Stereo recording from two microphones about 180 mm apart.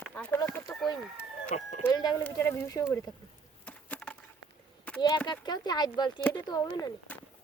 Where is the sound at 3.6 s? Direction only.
5° left (ahead or behind).